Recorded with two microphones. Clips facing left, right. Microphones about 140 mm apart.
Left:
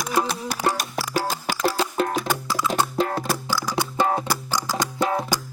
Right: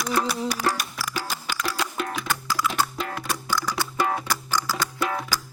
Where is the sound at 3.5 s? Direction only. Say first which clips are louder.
Even; 10° left (ahead or behind).